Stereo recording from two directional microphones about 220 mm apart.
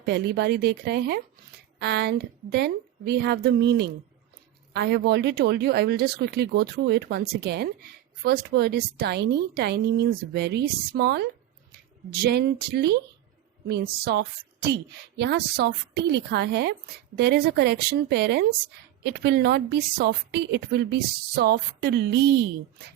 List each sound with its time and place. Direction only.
0.0 s speech: 50° right (ahead or behind)